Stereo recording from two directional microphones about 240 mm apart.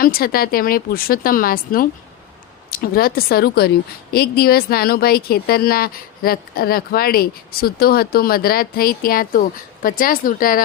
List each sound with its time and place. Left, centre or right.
0.0 s speech: left